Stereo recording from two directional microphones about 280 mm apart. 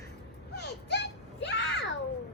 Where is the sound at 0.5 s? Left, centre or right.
Left.